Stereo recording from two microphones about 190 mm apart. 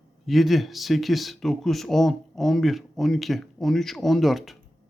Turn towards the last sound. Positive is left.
turn(degrees=0)  # may be behind; listen again after turning